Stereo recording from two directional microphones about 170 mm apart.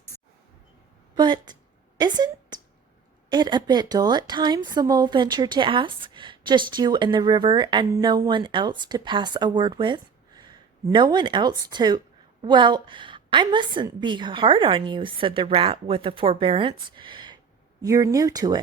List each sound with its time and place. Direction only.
1.1 s a woman's voice: 25° right (ahead or behind)
2.0 s a sound: 25° right (ahead or behind)
3.2 s a woman's voice: 25° right (ahead or behind)